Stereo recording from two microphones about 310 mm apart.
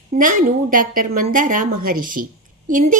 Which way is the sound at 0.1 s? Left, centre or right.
Right.